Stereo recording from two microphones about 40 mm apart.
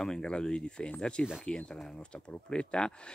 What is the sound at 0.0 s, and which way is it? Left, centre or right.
Speech, centre.